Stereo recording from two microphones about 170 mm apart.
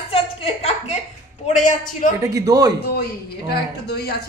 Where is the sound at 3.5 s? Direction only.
70° left (ahead or behind).